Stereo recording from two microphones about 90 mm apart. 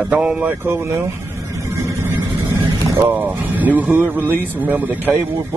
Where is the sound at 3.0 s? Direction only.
20° right (ahead or behind).